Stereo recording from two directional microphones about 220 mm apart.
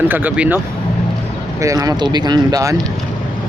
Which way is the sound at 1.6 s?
15° right (ahead or behind).